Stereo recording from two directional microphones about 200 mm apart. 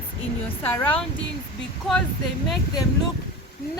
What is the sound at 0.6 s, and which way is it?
Speech, 10° left (ahead or behind).